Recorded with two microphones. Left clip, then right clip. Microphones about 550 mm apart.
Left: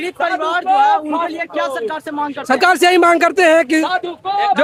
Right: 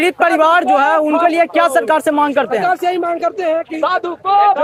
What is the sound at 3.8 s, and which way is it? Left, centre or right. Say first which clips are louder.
Speech: right 4 dB; centre.